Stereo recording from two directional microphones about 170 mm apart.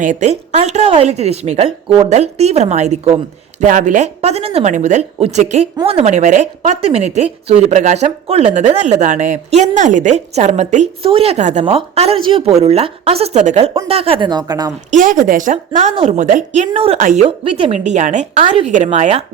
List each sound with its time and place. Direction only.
0.0 s speech: 45° right (ahead or behind)
11.6 s speech: 30° right (ahead or behind)
14.8 s speech: 50° right (ahead or behind)